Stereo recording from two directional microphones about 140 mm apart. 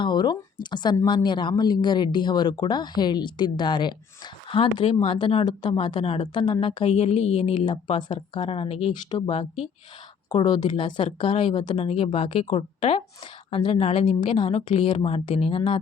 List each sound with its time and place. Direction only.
0.0 s speech: 35° left (ahead or behind)
6.9 s a woman's voice: 50° left (ahead or behind)